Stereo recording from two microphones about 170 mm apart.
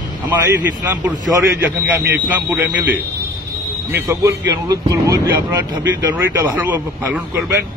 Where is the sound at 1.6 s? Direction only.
10° right (ahead or behind).